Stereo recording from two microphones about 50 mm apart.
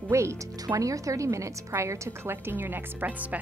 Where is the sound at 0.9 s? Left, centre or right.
Right.